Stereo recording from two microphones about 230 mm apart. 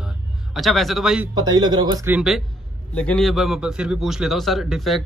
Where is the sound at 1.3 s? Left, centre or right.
Centre.